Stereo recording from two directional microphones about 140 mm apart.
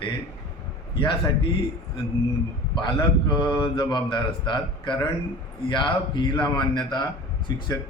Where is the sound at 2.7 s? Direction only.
35° left (ahead or behind).